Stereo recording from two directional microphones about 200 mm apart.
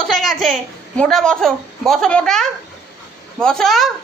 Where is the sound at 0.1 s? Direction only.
Centre (ahead or behind).